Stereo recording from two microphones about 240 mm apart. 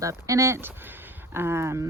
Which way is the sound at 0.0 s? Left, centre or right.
Centre.